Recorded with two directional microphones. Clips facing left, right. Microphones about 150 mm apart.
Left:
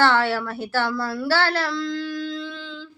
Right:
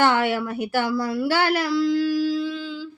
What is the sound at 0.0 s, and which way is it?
A woman's voice, 15° right (ahead or behind).